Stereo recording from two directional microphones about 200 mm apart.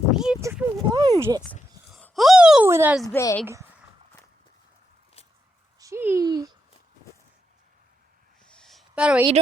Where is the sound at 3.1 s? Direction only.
15° left (ahead or behind).